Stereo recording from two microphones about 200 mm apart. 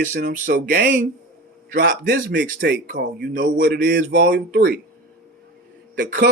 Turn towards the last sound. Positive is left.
turn(degrees=-45)  # may be behind; listen again after turning